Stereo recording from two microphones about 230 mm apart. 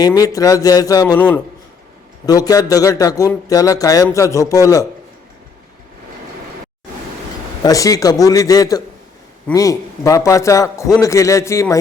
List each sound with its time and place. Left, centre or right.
0.0 s speech: centre
7.6 s speech: centre